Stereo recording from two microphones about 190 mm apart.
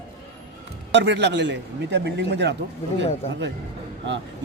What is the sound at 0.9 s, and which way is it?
Speech, 65° right (ahead or behind).